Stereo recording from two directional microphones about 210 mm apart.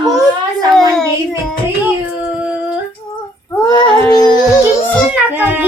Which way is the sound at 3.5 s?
15° left (ahead or behind).